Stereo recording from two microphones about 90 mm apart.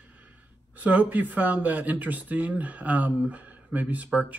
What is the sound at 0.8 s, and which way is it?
Speech, 15° right (ahead or behind).